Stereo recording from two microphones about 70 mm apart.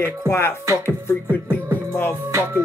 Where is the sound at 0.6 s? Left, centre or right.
Right.